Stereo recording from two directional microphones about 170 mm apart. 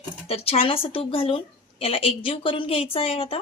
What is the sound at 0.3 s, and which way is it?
A woman's voice, 35° left (ahead or behind).